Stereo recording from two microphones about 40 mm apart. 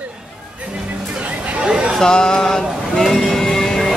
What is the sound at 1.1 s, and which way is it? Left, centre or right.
Chatter, right.